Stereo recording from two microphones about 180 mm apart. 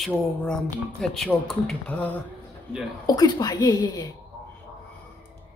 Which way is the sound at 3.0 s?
20° left (ahead or behind).